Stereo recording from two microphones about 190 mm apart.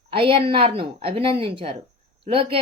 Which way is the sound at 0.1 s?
30° right (ahead or behind).